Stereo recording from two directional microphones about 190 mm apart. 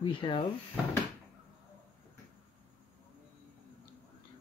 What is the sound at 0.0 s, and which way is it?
Speech, 25° left (ahead or behind).